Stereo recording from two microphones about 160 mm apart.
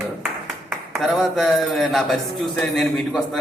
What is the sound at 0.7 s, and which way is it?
A man's voice, centre (ahead or behind).